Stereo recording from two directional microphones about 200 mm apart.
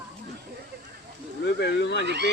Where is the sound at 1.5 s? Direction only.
55° left (ahead or behind).